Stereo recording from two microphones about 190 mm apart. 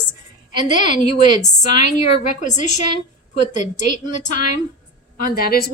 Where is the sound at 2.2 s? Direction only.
40° left (ahead or behind).